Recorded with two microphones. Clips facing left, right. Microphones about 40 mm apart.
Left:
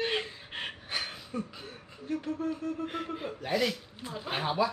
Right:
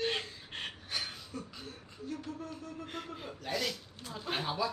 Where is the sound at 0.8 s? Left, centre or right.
Left.